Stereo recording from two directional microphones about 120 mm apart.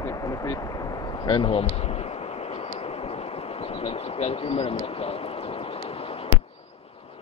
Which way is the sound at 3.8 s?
55° left (ahead or behind).